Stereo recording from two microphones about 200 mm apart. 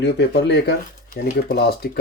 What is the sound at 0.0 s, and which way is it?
Speech, 60° left (ahead or behind).